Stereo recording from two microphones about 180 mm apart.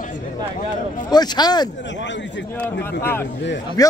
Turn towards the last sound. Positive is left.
turn(degrees=20)  # may be behind; listen again after turning